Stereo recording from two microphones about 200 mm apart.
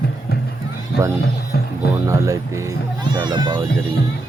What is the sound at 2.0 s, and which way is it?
Speech, 15° right (ahead or behind).